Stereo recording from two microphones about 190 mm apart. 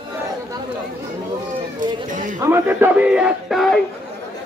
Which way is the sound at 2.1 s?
45° right (ahead or behind).